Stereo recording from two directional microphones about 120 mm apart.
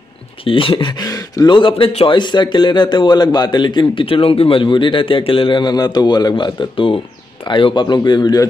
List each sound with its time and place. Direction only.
0.5 s speech: 50° left (ahead or behind)
0.9 s speech: 30° left (ahead or behind); by 2.1 s 50° left (ahead or behind)
2.1 s a man's voice: 40° left (ahead or behind)